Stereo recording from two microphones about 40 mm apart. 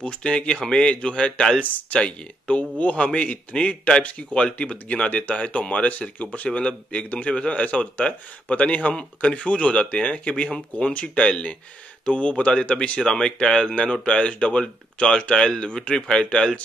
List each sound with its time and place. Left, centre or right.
0.0 s a man's voice: left
1.6 s speech: left
2.0 s a man's voice: left